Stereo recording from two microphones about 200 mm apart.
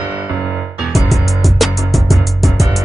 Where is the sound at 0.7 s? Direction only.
Centre (ahead or behind).